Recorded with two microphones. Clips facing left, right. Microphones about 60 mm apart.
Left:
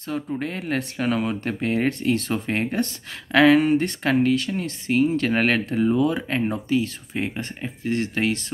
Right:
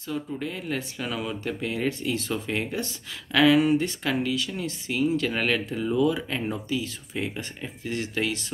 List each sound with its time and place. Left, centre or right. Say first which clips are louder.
0.4 s speech: left 4 dB; left